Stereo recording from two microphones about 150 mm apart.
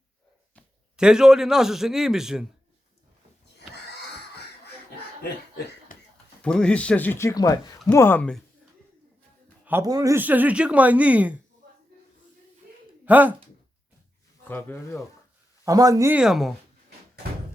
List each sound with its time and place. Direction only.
0.9 s a man's voice: 5° right (ahead or behind)
6.4 s speech: 5° left (ahead or behind)
9.8 s speech: 25° right (ahead or behind)
13.1 s speech: 10° right (ahead or behind)
14.4 s speech: 15° left (ahead or behind)
15.6 s speech: 25° right (ahead or behind)
16.1 s a man's voice: 5° right (ahead or behind)